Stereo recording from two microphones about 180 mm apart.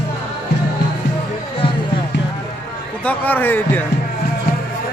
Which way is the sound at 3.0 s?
10° left (ahead or behind).